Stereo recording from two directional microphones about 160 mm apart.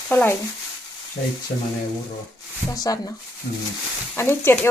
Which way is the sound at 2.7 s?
20° left (ahead or behind).